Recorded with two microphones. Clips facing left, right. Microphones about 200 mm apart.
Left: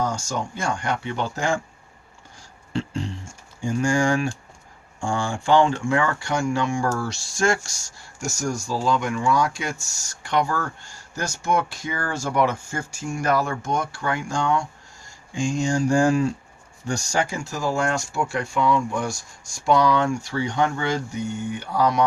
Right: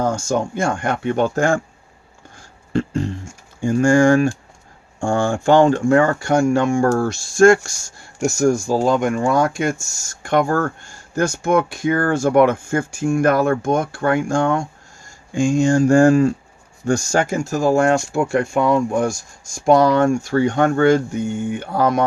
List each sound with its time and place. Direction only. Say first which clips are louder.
0.0 s speech: right 7 dB; 50° right (ahead or behind)
2.7 s speech: right 7 dB; 50° right (ahead or behind)
6.8 s speech: right 8 dB; 60° right (ahead or behind)